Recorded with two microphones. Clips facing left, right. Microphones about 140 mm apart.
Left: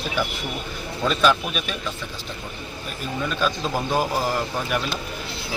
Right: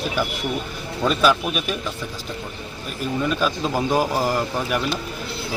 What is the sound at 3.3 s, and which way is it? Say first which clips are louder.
A man's voice: left 1 dB; 5° right (ahead or behind).